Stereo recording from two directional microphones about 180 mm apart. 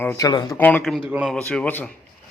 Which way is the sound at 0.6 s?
10° left (ahead or behind).